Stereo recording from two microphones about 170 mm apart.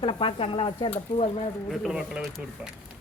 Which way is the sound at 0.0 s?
35° left (ahead or behind).